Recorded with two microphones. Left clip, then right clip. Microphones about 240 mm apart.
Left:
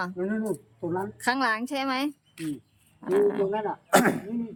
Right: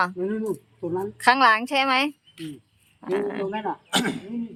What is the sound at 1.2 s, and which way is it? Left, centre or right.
A woman's voice, centre.